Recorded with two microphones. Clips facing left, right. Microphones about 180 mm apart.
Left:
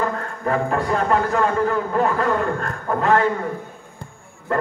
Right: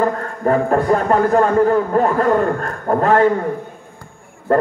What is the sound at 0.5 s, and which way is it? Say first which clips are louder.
A man's voice: right 6 dB; 45° right (ahead or behind).